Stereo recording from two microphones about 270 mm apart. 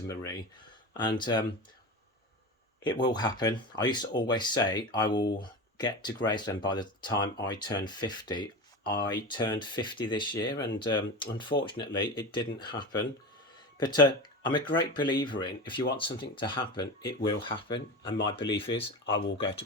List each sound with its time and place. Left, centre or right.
0.1 s speech: centre
2.8 s speech: centre
10.5 s speech: left
10.8 s speech: centre